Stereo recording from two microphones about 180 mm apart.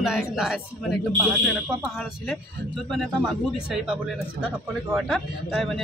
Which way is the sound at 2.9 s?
Centre (ahead or behind).